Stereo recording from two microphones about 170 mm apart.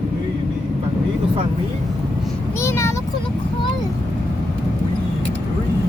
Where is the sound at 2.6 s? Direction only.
15° left (ahead or behind).